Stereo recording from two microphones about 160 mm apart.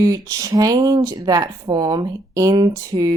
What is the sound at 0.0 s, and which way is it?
Speech, 20° right (ahead or behind).